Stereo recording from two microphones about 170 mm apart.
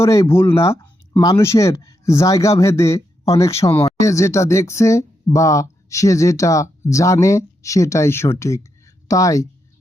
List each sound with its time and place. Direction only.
0.0 s speech: 15° left (ahead or behind)